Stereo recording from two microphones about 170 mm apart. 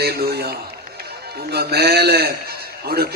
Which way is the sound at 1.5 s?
70° right (ahead or behind).